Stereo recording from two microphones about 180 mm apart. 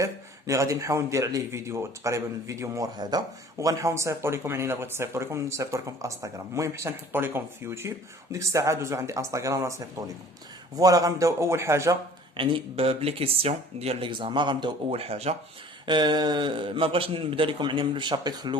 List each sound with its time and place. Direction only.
0.0 s a man's voice: 15° right (ahead or behind)
12.4 s speech: 30° right (ahead or behind)
15.9 s a man's voice: 25° right (ahead or behind)